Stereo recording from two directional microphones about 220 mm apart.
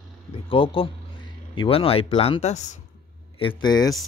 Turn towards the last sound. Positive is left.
turn(degrees=20)  # may be behind; listen again after turning